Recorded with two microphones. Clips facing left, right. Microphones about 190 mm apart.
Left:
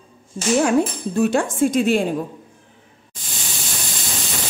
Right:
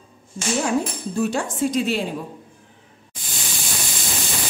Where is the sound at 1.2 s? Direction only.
55° left (ahead or behind).